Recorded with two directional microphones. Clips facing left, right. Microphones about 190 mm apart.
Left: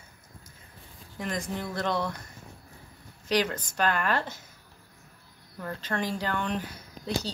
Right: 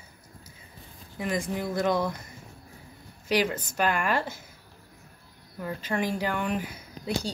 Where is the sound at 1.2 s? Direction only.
10° right (ahead or behind).